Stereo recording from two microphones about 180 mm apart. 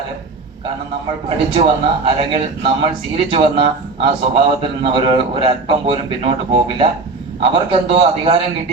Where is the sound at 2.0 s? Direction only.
30° right (ahead or behind).